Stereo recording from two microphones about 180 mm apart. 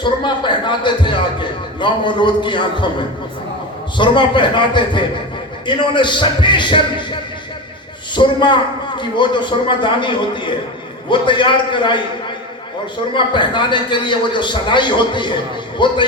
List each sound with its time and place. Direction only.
0.0 s a man's voice: 25° left (ahead or behind)
3.9 s a man's voice: 25° left (ahead or behind)
13.1 s a man's voice: 25° left (ahead or behind)